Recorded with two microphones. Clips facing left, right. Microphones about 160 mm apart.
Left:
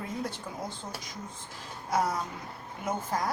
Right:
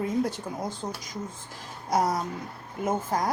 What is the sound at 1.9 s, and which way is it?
Speech, 40° right (ahead or behind).